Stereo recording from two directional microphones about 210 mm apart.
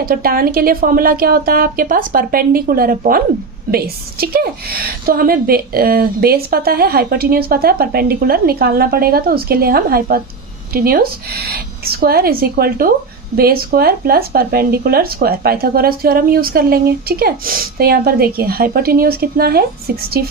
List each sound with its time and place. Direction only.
0.0 s a woman's voice: 45° right (ahead or behind)